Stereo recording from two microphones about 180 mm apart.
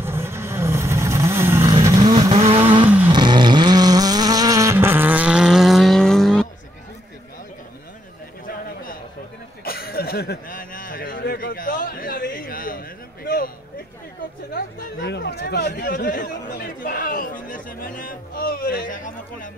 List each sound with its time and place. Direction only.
0.0 s vehicle: 15° right (ahead or behind)
2.3 s vehicle: 35° right (ahead or behind); by 6.4 s 5° left (ahead or behind)
9.7 s a sound: 60° left (ahead or behind)
14.5 s chatter: 70° left (ahead or behind); by 19.5 s 45° left (ahead or behind)